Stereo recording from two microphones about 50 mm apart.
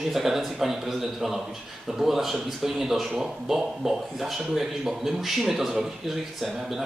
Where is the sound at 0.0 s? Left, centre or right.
Centre.